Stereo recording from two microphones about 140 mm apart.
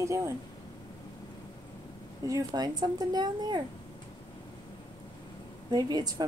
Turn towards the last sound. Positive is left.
turn(degrees=-25)  # may be behind; listen again after turning